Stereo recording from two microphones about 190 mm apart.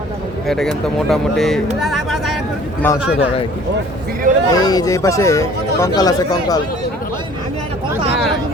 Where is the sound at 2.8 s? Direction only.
10° left (ahead or behind).